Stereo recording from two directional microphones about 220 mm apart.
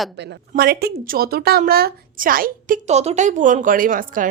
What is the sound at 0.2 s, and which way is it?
Speech, 45° right (ahead or behind).